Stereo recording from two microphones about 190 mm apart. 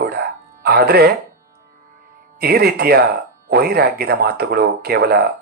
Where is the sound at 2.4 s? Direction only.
55° right (ahead or behind).